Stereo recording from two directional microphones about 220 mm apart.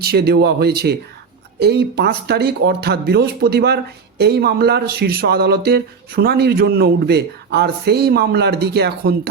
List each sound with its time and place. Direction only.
0.0 s speech: 45° right (ahead or behind)